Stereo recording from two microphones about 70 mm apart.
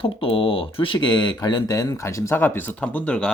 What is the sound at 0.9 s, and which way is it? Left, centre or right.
Speech, left.